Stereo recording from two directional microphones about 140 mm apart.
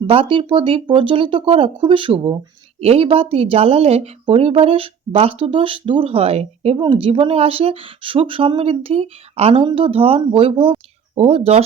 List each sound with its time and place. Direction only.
0.1 s speech: 40° right (ahead or behind)
2.8 s speech: 45° right (ahead or behind)